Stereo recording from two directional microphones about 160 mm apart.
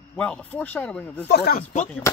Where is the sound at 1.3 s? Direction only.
80° left.